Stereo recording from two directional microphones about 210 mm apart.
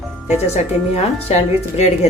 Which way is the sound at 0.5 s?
30° left (ahead or behind).